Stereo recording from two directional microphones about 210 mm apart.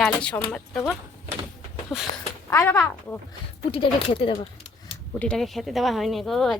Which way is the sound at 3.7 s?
25° left (ahead or behind).